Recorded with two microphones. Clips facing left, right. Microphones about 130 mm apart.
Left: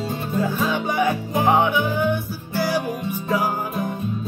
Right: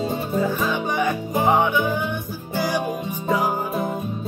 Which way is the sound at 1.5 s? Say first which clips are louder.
Even; 10° left (ahead or behind).